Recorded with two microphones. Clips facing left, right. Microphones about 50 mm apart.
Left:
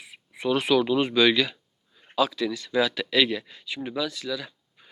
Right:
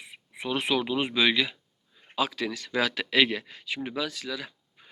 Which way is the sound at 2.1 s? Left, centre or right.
Right.